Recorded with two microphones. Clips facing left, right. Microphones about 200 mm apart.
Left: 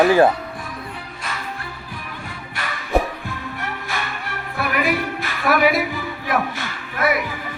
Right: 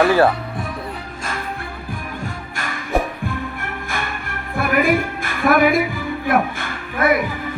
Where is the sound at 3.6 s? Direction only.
50° right (ahead or behind).